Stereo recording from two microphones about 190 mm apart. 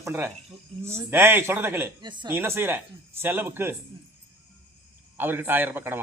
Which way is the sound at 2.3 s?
10° right (ahead or behind).